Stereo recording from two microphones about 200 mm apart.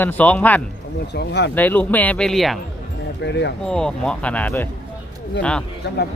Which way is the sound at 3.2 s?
60° left (ahead or behind).